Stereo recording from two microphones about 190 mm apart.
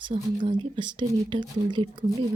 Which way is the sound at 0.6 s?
25° right (ahead or behind).